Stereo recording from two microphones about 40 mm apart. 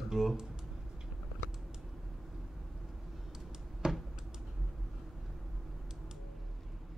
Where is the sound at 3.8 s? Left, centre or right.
Right.